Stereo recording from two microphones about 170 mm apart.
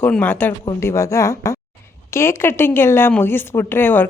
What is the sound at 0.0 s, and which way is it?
Speech, 10° left (ahead or behind).